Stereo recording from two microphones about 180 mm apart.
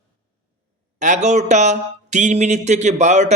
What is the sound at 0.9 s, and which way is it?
Speech, 40° right (ahead or behind).